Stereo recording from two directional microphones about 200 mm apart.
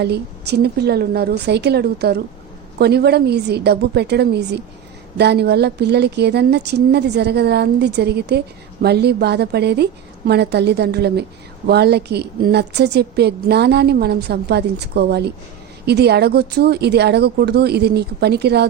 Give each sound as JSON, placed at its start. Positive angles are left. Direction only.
{"t": 0.0, "sound": "a woman's voice", "side_deg": -55}